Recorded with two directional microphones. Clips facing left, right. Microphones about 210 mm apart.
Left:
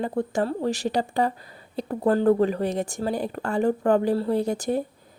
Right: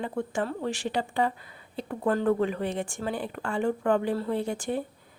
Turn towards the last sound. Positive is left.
turn(degrees=40)  # may be behind; listen again after turning